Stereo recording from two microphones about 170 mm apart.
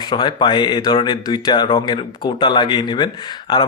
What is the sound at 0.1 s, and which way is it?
Speech, 25° left (ahead or behind).